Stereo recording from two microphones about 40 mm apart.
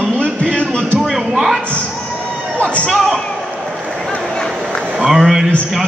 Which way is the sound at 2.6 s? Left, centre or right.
Left.